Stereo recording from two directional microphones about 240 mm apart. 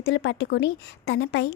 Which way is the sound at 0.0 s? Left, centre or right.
Left.